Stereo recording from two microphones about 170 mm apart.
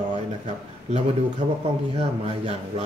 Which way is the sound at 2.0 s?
35° right (ahead or behind).